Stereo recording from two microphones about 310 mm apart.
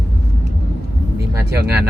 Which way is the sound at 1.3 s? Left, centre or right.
Centre.